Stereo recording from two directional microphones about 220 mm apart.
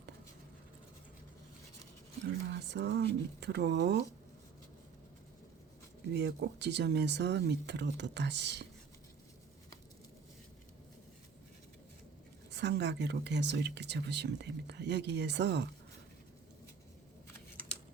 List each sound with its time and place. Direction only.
2.6 s speech: 50° right (ahead or behind)
6.1 s speech: 50° right (ahead or behind)
12.5 s speech: 50° right (ahead or behind)